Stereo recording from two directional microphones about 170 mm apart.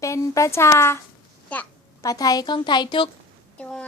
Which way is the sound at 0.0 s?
20° left (ahead or behind).